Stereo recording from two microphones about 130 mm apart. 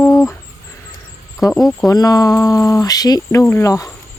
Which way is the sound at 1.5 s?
Centre (ahead or behind).